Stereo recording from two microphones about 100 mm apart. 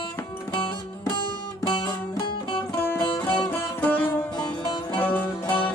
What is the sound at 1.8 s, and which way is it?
Music, 50° left (ahead or behind).